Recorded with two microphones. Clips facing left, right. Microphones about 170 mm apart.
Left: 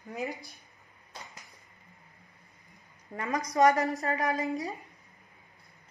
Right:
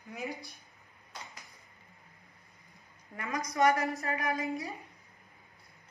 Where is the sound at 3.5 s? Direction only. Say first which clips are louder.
Left 4 dB; 40° left (ahead or behind).